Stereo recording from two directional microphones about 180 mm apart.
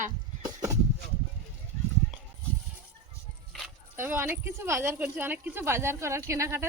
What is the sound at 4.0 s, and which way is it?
Speech, 10° right (ahead or behind).